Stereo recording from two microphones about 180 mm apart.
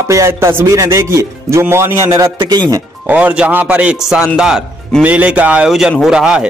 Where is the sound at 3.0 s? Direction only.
10° right (ahead or behind).